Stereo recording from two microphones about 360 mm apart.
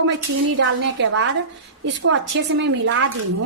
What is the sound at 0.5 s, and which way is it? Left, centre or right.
A woman's voice, right.